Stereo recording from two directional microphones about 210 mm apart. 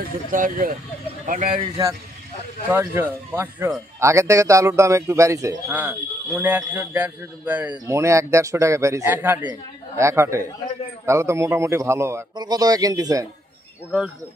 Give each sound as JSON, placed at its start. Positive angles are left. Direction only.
{"t": 0.3, "sound": "speech", "side_deg": -40}
{"t": 1.5, "sound": "a man's voice", "side_deg": -20}